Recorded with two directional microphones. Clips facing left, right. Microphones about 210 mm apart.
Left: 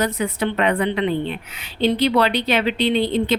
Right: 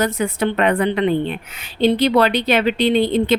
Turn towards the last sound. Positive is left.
turn(degrees=-50)  # may be behind; listen again after turning